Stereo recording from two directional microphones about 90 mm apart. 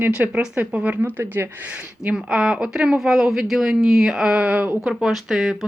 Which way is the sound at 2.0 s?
10° right (ahead or behind).